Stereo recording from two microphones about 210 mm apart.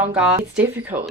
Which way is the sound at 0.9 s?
25° right (ahead or behind).